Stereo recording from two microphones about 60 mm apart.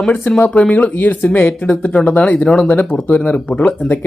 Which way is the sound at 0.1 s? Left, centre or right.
Left.